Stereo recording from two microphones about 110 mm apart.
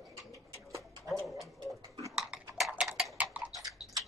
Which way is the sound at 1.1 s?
Centre (ahead or behind).